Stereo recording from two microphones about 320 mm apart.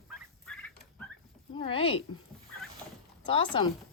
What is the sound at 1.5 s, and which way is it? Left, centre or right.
Speech, centre.